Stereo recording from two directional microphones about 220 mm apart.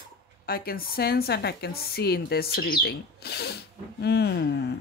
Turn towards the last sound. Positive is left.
turn(degrees=50)  # may be behind; listen again after turning